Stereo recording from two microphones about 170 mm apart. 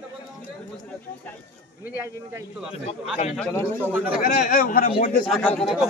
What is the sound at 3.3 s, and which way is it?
Speech, 5° left (ahead or behind).